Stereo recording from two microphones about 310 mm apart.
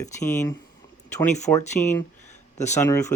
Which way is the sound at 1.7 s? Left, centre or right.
Left.